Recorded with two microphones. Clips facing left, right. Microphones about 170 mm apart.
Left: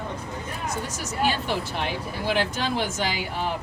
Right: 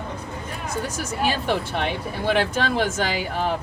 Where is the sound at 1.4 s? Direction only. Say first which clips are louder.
Right 4 dB; 55° right (ahead or behind).